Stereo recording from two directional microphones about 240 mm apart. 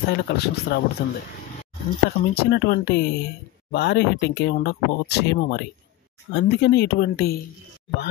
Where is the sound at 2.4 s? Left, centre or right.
Left.